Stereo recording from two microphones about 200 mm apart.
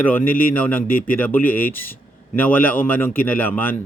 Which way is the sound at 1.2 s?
10° left (ahead or behind).